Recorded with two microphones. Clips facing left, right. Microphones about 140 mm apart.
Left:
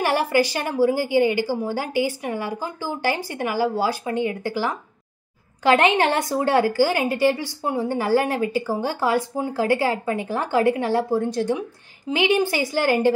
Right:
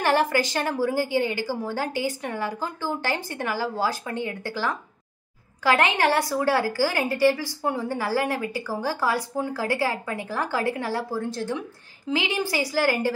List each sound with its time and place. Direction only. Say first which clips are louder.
0.0 s a woman's voice: left 2 dB; 10° left (ahead or behind)